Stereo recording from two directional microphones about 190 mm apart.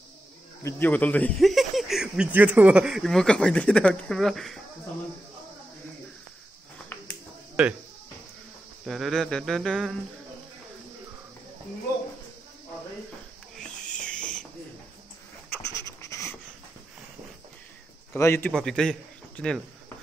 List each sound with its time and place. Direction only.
0.7 s speech: 10° left (ahead or behind)
6.9 s a sound: 10° left (ahead or behind)
7.6 s speech: centre (ahead or behind)
8.8 s speech: centre (ahead or behind)
13.6 s owl: 5° left (ahead or behind)
15.5 s a sound: 15° left (ahead or behind)
18.1 s a man's voice: 15° left (ahead or behind)